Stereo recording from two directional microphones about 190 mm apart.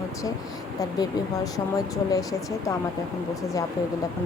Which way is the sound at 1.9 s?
20° left (ahead or behind).